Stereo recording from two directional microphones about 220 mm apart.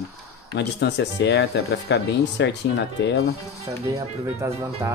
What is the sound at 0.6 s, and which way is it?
Speech, 50° left (ahead or behind).